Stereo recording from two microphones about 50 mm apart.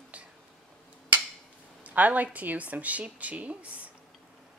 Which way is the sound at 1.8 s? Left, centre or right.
Right.